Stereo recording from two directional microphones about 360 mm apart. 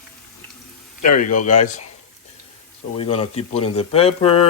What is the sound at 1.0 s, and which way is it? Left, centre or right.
Speech, left.